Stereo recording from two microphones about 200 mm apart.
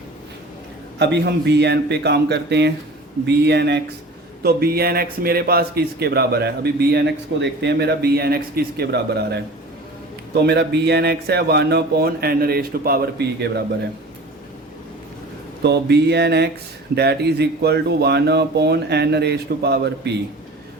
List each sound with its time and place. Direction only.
0.9 s a man's voice: 60° right (ahead or behind)
15.6 s speech: 55° right (ahead or behind)